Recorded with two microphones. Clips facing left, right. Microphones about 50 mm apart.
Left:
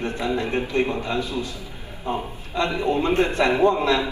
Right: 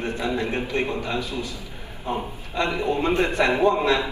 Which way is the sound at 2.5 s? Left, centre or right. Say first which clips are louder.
Left 1 dB; right.